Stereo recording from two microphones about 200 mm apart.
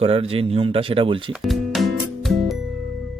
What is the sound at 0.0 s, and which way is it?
Speech, 30° right (ahead or behind).